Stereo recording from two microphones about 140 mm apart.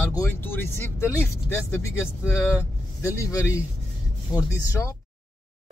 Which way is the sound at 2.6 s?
20° left (ahead or behind).